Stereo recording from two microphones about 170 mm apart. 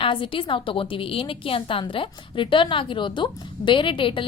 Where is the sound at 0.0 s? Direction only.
30° left (ahead or behind).